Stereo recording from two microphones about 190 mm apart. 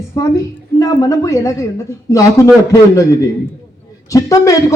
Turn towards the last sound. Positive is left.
turn(degrees=15)  # may be behind; listen again after turning